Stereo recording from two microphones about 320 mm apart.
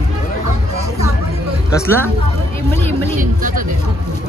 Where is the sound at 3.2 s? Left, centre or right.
Right.